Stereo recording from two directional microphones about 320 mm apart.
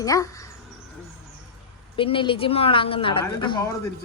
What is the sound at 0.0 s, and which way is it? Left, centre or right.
Speech, centre.